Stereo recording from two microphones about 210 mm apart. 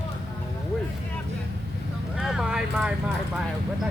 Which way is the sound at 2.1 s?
Centre (ahead or behind).